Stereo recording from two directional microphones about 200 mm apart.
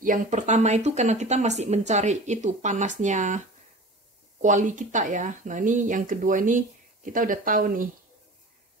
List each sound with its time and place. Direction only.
0.0 s speech: 40° right (ahead or behind)